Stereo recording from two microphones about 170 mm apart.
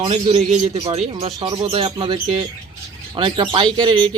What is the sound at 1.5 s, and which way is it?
Speech, 25° right (ahead or behind).